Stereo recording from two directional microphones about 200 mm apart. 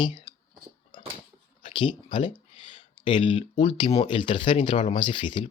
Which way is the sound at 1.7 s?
25° left (ahead or behind).